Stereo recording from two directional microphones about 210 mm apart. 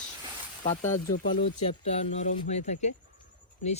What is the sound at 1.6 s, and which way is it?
Speech, 30° left (ahead or behind).